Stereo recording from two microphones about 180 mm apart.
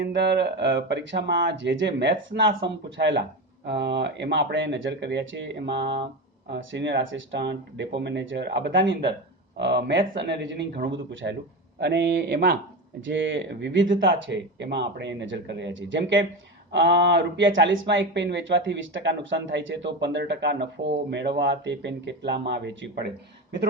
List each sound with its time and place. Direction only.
0.0 s speech: 75° right (ahead or behind)
6.5 s speech: 90° right
9.6 s speech: 70° right (ahead or behind); by 11.3 s 90° right
11.8 s speech: 70° right (ahead or behind)
13.0 s speech: 90° right
16.7 s speech: 75° right (ahead or behind)